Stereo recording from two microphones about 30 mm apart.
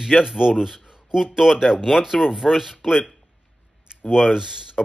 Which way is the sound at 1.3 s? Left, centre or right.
Centre.